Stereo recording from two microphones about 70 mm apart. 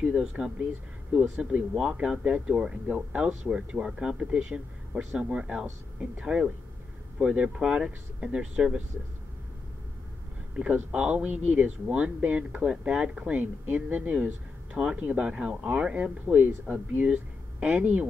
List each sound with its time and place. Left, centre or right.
0.1 s speech: centre
1.7 s speech: centre
10.5 s speech: centre